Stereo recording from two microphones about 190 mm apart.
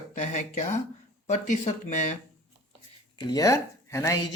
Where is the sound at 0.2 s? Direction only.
40° left (ahead or behind).